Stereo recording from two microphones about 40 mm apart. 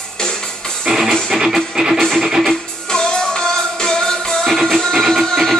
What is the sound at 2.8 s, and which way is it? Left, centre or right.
Music, centre.